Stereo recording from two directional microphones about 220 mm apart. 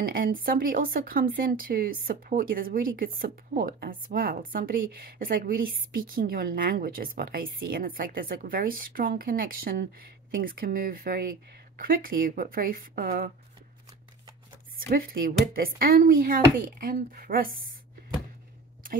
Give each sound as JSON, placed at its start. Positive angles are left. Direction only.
{"t": 0.0, "sound": "speech", "side_deg": -40}
{"t": 14.9, "sound": "speech", "side_deg": -40}